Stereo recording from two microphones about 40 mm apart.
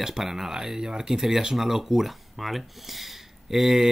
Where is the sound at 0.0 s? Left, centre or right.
Centre.